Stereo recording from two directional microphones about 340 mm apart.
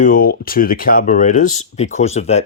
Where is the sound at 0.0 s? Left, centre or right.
Left.